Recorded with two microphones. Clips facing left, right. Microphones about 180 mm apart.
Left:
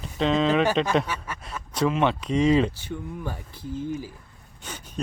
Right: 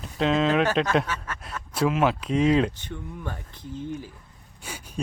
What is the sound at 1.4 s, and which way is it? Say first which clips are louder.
Speech: even; centre (ahead or behind).